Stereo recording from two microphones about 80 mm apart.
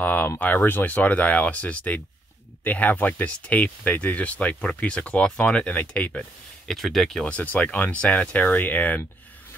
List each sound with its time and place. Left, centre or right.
0.0 s speech: left
6.7 s speech: centre
7.2 s speech: centre